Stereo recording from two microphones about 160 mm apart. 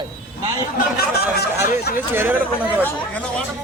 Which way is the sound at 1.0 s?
80° left.